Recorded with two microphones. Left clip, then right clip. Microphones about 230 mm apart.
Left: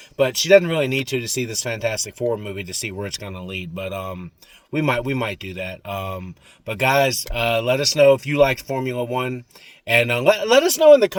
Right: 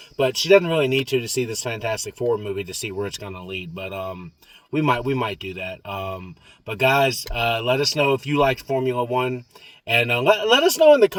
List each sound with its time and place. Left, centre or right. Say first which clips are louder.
0.2 s speech: left 2 dB; centre